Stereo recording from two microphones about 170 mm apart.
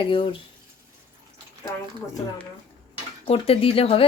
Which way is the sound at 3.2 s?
35° left (ahead or behind).